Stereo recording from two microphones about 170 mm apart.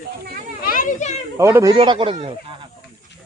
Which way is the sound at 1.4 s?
15° right (ahead or behind).